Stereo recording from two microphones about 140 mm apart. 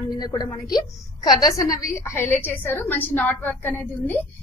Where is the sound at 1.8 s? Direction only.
15° left (ahead or behind).